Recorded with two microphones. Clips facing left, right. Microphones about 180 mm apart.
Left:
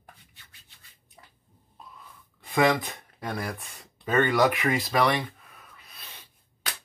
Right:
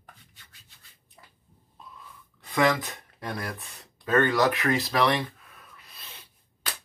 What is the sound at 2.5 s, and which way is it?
Speech, 20° left (ahead or behind).